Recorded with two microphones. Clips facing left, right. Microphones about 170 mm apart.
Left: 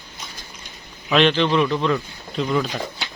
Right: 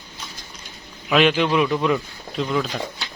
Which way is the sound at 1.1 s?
10° right (ahead or behind).